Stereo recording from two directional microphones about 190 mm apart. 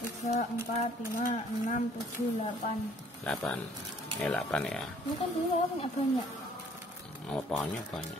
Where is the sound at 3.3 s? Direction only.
10° left (ahead or behind).